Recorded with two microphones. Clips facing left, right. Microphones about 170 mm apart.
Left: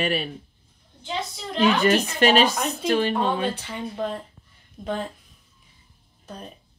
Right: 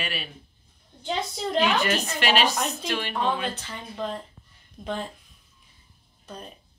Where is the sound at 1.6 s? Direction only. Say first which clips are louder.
Left 9 dB; 35° left (ahead or behind).